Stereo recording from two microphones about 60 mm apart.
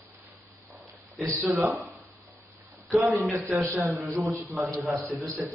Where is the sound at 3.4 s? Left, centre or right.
Right.